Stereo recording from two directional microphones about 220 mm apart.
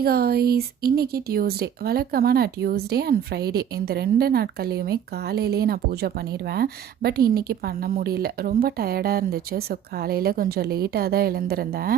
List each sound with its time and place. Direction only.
0.0 s speech: 45° right (ahead or behind)